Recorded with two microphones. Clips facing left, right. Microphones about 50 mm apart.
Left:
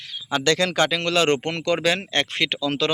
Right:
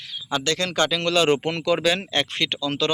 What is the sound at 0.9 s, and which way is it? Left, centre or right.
A man's voice, left.